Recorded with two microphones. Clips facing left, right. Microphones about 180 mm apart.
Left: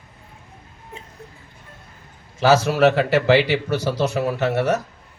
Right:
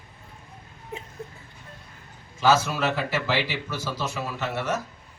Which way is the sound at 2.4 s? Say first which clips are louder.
Left 7 dB; 70° left (ahead or behind).